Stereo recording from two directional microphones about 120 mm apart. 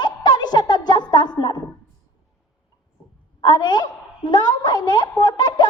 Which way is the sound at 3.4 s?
35° left (ahead or behind).